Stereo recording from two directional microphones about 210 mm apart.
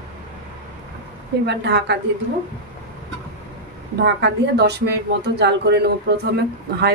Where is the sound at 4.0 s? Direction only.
50° right (ahead or behind).